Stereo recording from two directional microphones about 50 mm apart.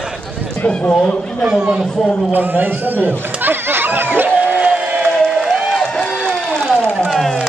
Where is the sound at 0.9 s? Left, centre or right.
Centre.